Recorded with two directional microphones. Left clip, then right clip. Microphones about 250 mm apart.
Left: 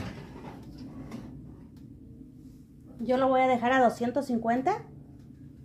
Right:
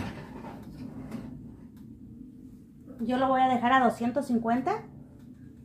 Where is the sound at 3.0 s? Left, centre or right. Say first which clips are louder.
Left 1 dB; left.